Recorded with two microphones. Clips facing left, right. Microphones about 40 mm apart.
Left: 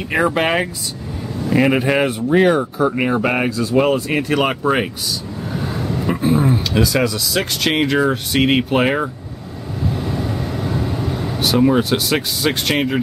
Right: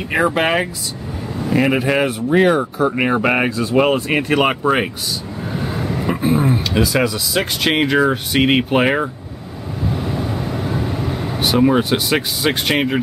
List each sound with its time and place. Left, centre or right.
0.1 s speech: centre
3.0 s speech: centre
9.8 s vehicle: centre